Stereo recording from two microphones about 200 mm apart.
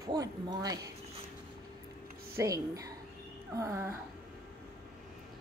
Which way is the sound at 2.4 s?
15° right (ahead or behind).